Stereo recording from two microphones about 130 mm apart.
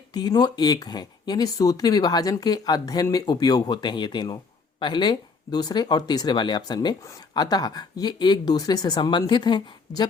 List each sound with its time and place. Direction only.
0.1 s speech: 35° left (ahead or behind)